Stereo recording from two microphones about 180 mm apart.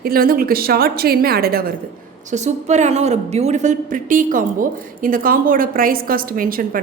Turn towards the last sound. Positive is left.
turn(degrees=-50)  # may be behind; listen again after turning